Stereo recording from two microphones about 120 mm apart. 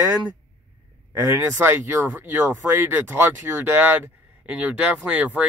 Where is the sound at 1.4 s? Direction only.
15° right (ahead or behind).